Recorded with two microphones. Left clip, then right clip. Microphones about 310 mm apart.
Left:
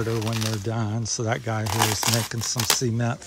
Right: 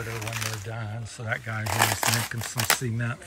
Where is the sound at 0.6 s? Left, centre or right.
Left.